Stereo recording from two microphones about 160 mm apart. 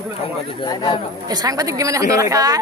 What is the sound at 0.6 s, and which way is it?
Speech, 25° left (ahead or behind).